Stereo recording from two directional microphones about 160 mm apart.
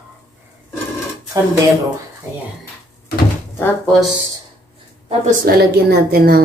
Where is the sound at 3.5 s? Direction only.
15° left (ahead or behind).